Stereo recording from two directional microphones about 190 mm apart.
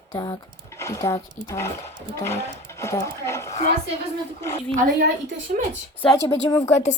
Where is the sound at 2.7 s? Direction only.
15° left (ahead or behind).